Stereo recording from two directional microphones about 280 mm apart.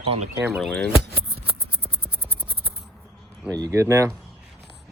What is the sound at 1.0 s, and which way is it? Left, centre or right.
Scissors, right.